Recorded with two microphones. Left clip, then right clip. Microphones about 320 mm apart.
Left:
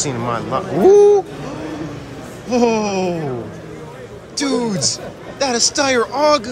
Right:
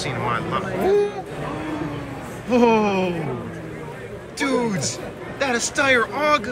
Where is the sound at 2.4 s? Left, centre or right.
Centre.